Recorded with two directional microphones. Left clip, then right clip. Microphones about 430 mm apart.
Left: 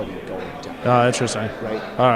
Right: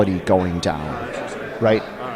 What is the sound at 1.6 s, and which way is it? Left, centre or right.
Speech, right.